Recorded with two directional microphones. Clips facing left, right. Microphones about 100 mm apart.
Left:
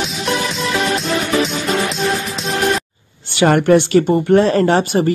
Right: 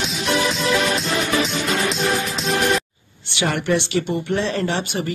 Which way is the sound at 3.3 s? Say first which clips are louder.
Left 9 dB; 50° left (ahead or behind).